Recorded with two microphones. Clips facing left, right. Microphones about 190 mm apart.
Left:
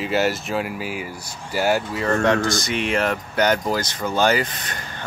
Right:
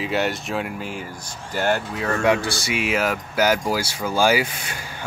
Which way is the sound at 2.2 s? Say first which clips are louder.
Right 2 dB; 10° right (ahead or behind).